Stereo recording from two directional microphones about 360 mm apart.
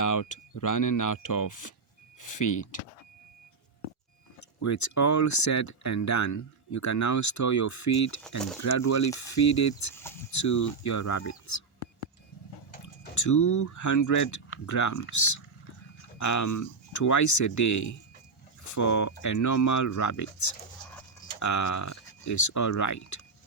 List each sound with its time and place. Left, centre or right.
0.0 s speech: left
4.4 s speech: left
9.0 s speech: centre
9.3 s speech: left
9.9 s speech: centre
10.3 s speech: left
13.1 s speech: left
16.1 s speech: left